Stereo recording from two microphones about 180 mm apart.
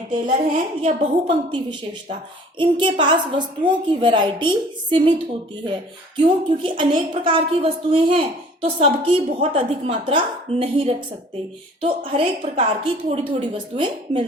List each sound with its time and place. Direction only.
0.3 s a woman's voice: 40° right (ahead or behind)
6.1 s a woman's voice: 30° right (ahead or behind)